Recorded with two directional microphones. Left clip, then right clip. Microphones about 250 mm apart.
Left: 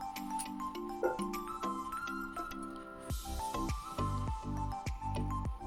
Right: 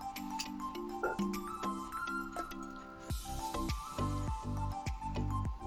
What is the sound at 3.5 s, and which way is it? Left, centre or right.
Music, centre.